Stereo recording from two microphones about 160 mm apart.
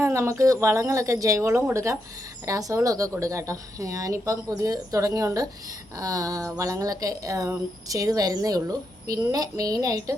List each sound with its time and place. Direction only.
0.0 s speech: 15° right (ahead or behind)